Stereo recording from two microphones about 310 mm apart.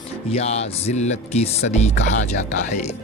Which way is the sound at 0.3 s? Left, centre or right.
Left.